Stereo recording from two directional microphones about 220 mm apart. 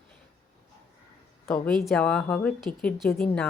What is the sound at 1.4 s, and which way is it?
Speech, 5° left (ahead or behind).